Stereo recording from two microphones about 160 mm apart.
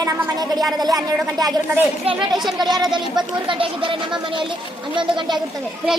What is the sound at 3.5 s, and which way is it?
Speech, 30° right (ahead or behind).